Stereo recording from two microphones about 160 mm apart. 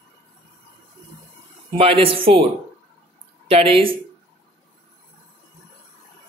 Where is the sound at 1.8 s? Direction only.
35° right (ahead or behind).